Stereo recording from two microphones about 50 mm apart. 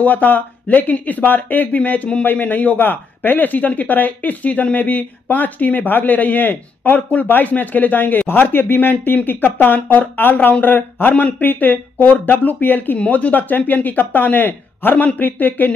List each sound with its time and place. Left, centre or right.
0.0 s a man's voice: left
13.0 s a man's voice: left